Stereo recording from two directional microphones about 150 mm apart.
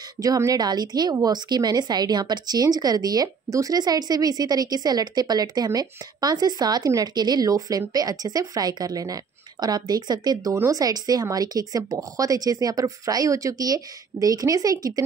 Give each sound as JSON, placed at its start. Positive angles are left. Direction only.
{"t": 0.2, "sound": "a woman's voice", "side_deg": -25}